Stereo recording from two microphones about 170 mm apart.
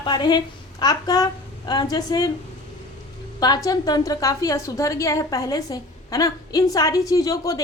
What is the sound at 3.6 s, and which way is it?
A woman's voice, 20° left (ahead or behind).